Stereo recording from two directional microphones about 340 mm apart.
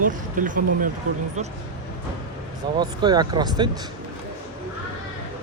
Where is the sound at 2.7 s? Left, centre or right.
Centre.